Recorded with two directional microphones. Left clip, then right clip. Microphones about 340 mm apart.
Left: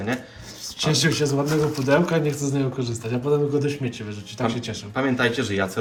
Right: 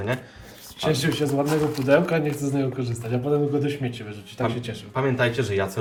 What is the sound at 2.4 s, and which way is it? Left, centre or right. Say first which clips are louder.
A man's voice: left 1 dB; centre.